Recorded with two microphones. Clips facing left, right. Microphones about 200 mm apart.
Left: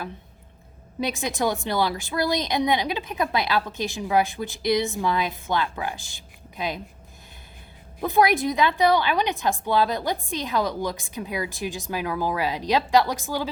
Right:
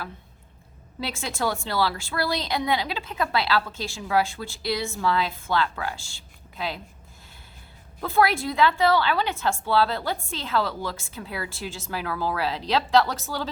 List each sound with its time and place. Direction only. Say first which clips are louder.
0.9 s speech: left 4 dB; 20° left (ahead or behind)
8.0 s speech: left 2 dB; 20° left (ahead or behind)